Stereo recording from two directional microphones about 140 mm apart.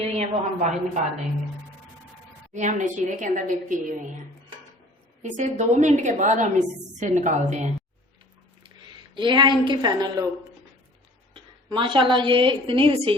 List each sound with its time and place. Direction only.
0.2 s a woman's voice: 55° right (ahead or behind)
2.5 s a woman's voice: 60° right (ahead or behind)
5.2 s a woman's voice: 55° right (ahead or behind)
9.1 s a woman's voice: 35° right (ahead or behind)
11.3 s a woman's voice: 35° right (ahead or behind)